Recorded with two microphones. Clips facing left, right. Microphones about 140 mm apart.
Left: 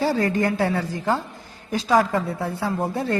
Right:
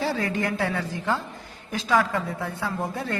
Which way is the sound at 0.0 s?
40° left (ahead or behind).